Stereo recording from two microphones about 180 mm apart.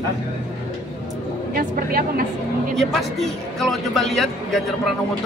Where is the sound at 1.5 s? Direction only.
50° right (ahead or behind).